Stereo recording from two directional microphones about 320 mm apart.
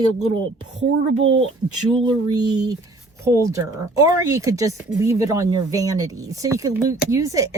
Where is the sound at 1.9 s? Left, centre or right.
Centre.